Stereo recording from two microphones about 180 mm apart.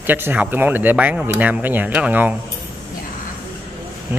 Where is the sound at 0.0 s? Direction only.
10° right (ahead or behind).